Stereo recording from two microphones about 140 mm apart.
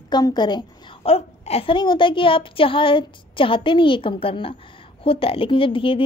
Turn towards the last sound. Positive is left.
turn(degrees=40)  # may be behind; listen again after turning